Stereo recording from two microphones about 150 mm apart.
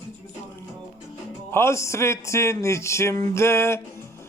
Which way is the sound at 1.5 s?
20° left (ahead or behind).